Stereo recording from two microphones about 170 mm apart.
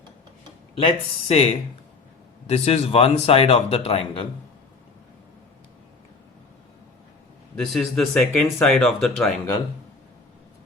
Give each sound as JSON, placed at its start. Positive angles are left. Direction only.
{"t": 1.3, "sound": "speech", "side_deg": 35}
{"t": 7.5, "sound": "speech", "side_deg": 5}